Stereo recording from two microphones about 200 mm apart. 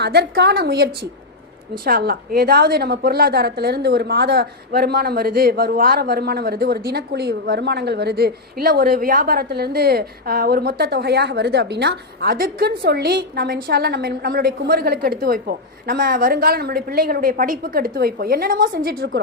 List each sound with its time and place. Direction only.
0.0 s a woman's voice: 55° right (ahead or behind)